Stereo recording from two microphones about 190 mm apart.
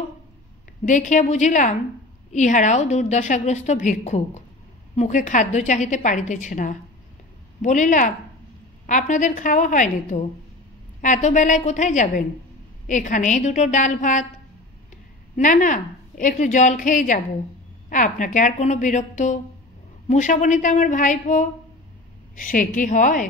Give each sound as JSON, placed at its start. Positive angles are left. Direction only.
{"t": 0.8, "sound": "a woman's voice", "side_deg": 40}
{"t": 15.3, "sound": "a woman's voice", "side_deg": 40}